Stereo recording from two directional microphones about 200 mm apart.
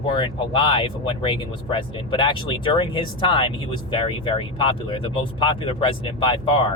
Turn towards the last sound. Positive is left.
turn(degrees=25)  # may be behind; listen again after turning